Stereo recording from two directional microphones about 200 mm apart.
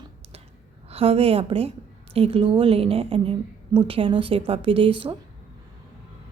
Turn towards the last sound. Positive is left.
turn(degrees=-25)  # may be behind; listen again after turning